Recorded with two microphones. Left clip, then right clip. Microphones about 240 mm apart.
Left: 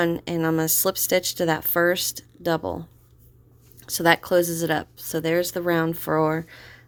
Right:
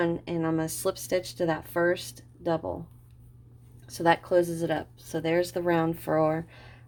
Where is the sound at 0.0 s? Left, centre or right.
Left.